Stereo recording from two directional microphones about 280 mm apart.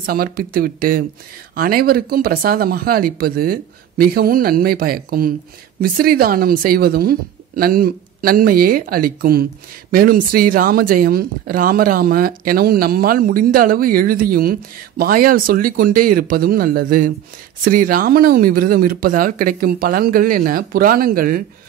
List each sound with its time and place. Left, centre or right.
0.0 s a woman's voice: right